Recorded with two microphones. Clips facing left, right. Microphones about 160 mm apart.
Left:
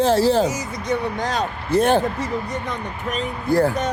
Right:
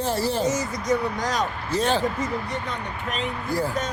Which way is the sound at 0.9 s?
25° left (ahead or behind).